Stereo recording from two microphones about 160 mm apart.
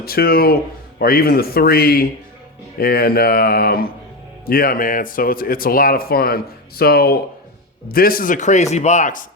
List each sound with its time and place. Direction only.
0.0 s a man's voice: 70° left (ahead or behind); by 9.2 s 50° left (ahead or behind)